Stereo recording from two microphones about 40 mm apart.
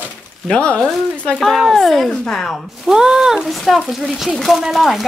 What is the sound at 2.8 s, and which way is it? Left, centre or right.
Speech, centre.